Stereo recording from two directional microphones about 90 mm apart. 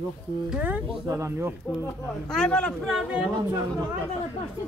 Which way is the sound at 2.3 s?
10° left (ahead or behind).